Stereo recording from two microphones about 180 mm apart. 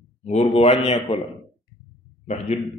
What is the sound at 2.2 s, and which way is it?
Speech, 40° left (ahead or behind).